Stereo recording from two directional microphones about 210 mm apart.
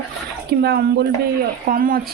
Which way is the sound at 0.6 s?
50° right (ahead or behind).